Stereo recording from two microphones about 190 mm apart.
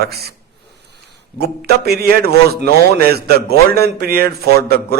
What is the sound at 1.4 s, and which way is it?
A man's voice, 55° right (ahead or behind).